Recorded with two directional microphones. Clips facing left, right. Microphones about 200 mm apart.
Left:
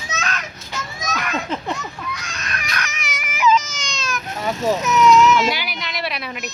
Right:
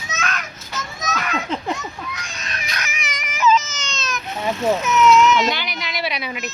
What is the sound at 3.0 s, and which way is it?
Baby cry, 5° left (ahead or behind).